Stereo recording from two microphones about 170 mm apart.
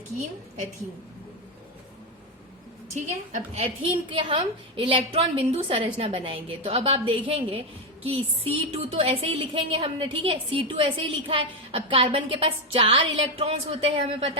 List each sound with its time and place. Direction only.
2.9 s a woman's voice: 45° right (ahead or behind)